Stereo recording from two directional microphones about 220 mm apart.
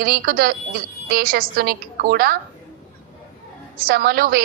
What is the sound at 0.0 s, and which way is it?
A woman's voice, 40° right (ahead or behind).